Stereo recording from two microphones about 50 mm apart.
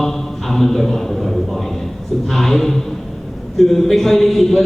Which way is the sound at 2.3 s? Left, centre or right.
Centre.